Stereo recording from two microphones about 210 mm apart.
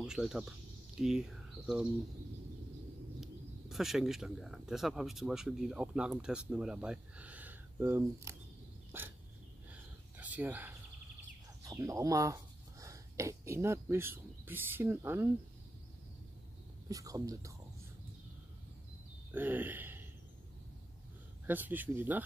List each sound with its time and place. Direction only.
0.0 s speech: centre (ahead or behind)
3.2 s speech: centre (ahead or behind)
8.9 s dog: 10° right (ahead or behind)
9.7 s a sound: 5° right (ahead or behind)
11.6 s speech: 15° right (ahead or behind)
16.9 s speech: 15° right (ahead or behind)
19.3 s a sound: 10° right (ahead or behind)
21.5 s speech: 10° right (ahead or behind)